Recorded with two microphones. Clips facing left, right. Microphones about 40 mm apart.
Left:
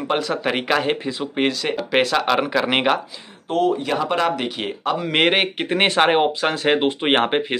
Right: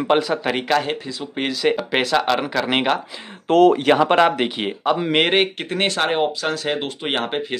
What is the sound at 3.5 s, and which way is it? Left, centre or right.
Speech, right.